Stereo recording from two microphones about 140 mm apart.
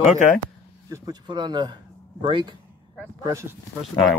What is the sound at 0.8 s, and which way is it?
Speech, 25° right (ahead or behind).